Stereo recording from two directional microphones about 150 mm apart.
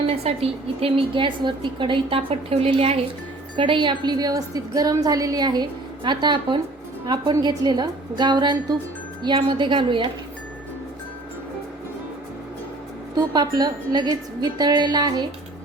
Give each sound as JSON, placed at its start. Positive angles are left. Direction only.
{"t": 0.0, "sound": "a woman's voice", "side_deg": -40}
{"t": 13.1, "sound": "a woman's voice", "side_deg": -25}